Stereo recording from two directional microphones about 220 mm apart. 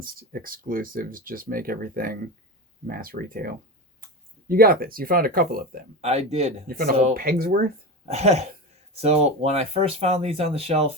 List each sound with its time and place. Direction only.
0.0 s speech: 40° right (ahead or behind)
6.0 s speech: 30° right (ahead or behind)
6.7 s speech: 40° right (ahead or behind)